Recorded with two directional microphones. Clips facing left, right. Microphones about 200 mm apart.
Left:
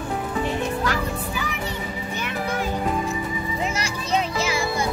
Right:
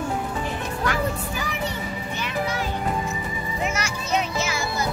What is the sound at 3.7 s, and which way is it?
Children playing, 30° left (ahead or behind).